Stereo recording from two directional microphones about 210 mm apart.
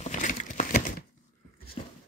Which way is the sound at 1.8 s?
30° left (ahead or behind).